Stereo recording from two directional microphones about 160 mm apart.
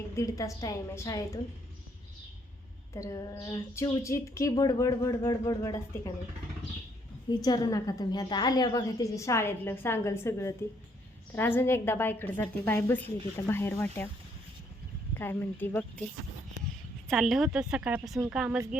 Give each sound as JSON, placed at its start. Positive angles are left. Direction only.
{"t": 0.2, "sound": "a woman's voice", "side_deg": 20}
{"t": 2.9, "sound": "a woman's voice", "side_deg": 20}
{"t": 7.3, "sound": "a woman's voice", "side_deg": 25}
{"t": 15.1, "sound": "a woman's voice", "side_deg": 15}
{"t": 17.1, "sound": "speech", "side_deg": 0}